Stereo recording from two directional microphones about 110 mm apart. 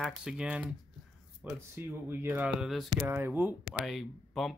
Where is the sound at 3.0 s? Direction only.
20° right (ahead or behind).